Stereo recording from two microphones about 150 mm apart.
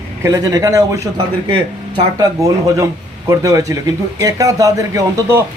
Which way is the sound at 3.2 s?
20° right (ahead or behind).